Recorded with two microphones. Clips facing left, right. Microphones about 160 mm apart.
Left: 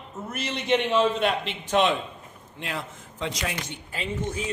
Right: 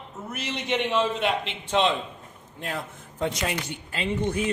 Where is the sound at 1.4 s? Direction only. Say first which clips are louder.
Left 1 dB; 25° right (ahead or behind).